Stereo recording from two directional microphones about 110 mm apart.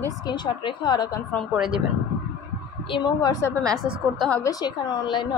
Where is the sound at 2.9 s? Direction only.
40° left (ahead or behind).